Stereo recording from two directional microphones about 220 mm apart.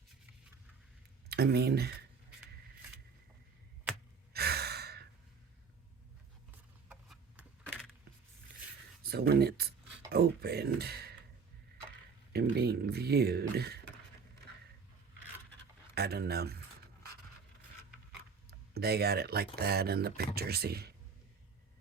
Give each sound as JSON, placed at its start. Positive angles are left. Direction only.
{"t": 1.3, "sound": "speech", "side_deg": -45}
{"t": 4.3, "sound": "sigh", "side_deg": -45}
{"t": 6.8, "sound": "a sound", "side_deg": -5}
{"t": 9.0, "sound": "speech", "side_deg": -45}
{"t": 12.3, "sound": "speech", "side_deg": -45}
{"t": 16.0, "sound": "speech", "side_deg": -45}
{"t": 18.7, "sound": "speech", "side_deg": -45}